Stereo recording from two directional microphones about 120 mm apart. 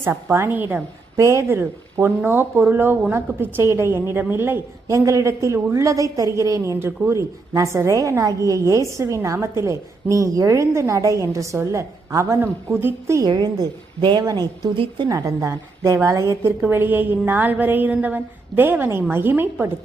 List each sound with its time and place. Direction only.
0.0 s a woman's voice: 20° right (ahead or behind)
13.2 s a woman's voice: 35° right (ahead or behind)
15.1 s a woman's voice: 25° right (ahead or behind)